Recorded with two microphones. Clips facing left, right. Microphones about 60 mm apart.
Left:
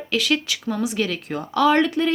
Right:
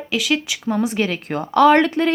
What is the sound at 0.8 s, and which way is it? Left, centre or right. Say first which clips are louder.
Speech: right 2 dB; right.